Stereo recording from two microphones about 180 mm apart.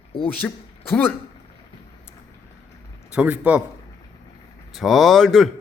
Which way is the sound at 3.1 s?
5° right (ahead or behind).